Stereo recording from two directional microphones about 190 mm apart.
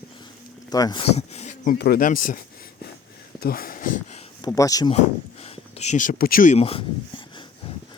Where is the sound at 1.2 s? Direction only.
35° left (ahead or behind).